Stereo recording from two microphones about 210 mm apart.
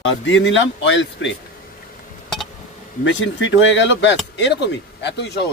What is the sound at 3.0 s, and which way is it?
Speech, 65° left (ahead or behind).